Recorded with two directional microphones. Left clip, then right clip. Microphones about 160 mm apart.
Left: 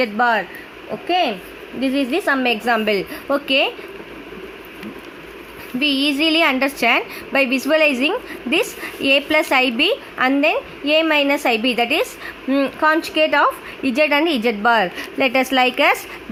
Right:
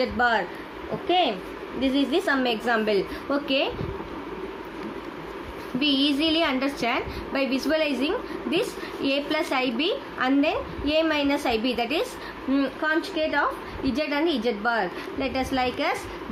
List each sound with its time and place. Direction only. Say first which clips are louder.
0.0 s a woman's voice: left 6 dB; 45° left (ahead or behind)
1.8 s a woman's voice: left 4 dB; 45° left (ahead or behind)
5.8 s a woman's voice: left 5 dB; 40° left (ahead or behind)